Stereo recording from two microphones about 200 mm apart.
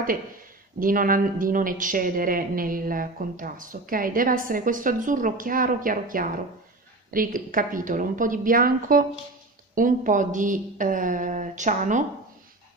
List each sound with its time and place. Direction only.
0.7 s a woman's voice: 45° right (ahead or behind)